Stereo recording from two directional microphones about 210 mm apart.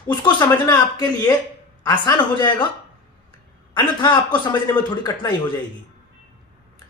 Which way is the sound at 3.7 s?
20° left (ahead or behind).